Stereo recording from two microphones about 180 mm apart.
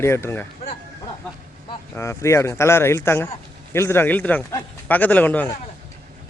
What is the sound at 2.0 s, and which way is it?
Speech, 15° left (ahead or behind).